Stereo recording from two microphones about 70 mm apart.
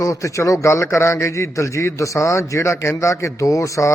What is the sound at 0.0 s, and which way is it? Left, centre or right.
A man's voice, left.